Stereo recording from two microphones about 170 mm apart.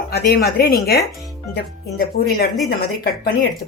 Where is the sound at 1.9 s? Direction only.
65° left (ahead or behind).